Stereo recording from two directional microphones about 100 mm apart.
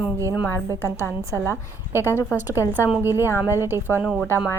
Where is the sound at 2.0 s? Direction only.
25° left (ahead or behind).